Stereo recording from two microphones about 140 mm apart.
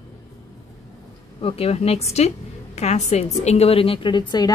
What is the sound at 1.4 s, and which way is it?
A woman's voice, 45° left (ahead or behind).